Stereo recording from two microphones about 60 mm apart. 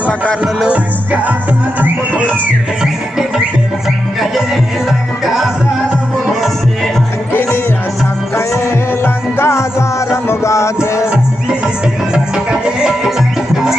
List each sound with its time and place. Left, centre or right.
0.0 s music: left
0.7 s music: right
2.8 s music: centre
4.9 s music: centre
8.4 s music: left
11.1 s music: centre